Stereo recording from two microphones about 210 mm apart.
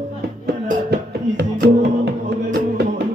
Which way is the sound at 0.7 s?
50° right (ahead or behind).